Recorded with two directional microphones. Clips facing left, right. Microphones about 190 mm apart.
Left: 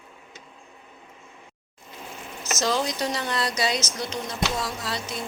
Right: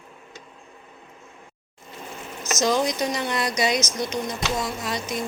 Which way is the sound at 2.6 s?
15° right (ahead or behind).